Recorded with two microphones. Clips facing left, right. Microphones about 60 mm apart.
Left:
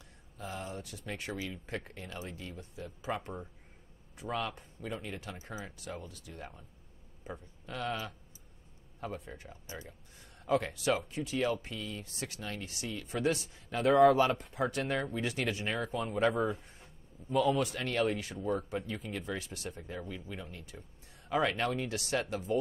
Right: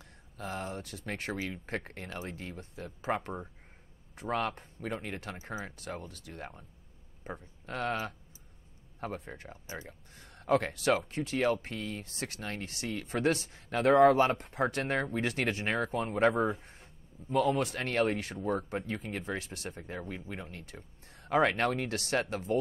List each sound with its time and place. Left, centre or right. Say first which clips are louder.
0.4 s speech: right 3 dB; right
4.2 s speech: right 4 dB; right
14.2 s speech: right 2 dB; right
16.6 s a sound: right 1 dB; right
17.6 s speech: right 2 dB; right